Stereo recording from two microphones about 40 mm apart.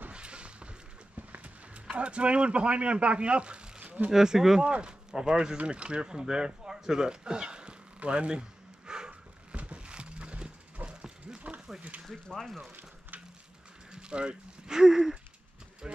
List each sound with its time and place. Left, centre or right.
0.1 s a sound: right
1.9 s speech: right
4.1 s speech: centre
4.6 s speech: right
5.7 s a sound: right
9.6 s horse: right
11.2 s a sound: right
12.4 s speech: centre
13.9 s speech: right